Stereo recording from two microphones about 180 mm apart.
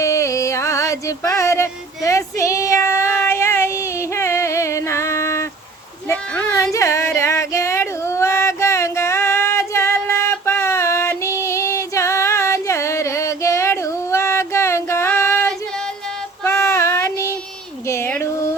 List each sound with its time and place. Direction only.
0.0 s music: 15° left (ahead or behind)
6.1 s female singing: 10° left (ahead or behind)
16.4 s child singing: 15° left (ahead or behind)
17.8 s a sound: 15° left (ahead or behind)